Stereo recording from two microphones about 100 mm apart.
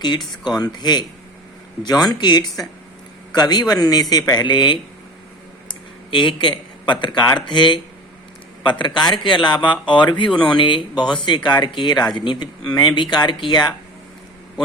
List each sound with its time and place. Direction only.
0.4 s a man's voice: 45° left (ahead or behind)
6.1 s a man's voice: 55° left (ahead or behind)